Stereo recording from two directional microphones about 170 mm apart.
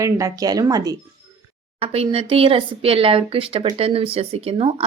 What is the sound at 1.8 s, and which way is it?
Speech, 35° right (ahead or behind).